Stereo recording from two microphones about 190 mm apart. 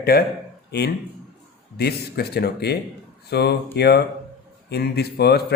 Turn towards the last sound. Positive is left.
turn(degrees=60)  # may be behind; listen again after turning